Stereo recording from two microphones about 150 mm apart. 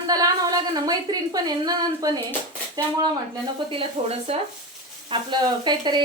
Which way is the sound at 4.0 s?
45° right (ahead or behind).